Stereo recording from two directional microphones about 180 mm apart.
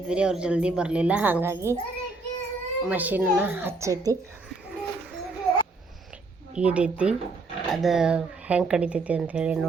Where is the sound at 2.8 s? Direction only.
10° right (ahead or behind).